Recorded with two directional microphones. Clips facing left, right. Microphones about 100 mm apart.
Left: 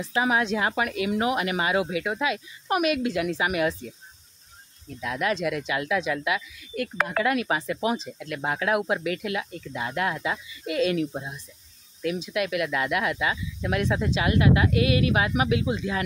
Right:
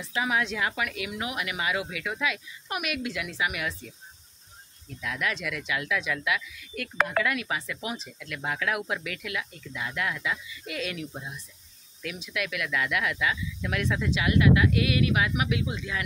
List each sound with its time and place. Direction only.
0.0 s speech: 30° left (ahead or behind)
5.0 s speech: 30° left (ahead or behind)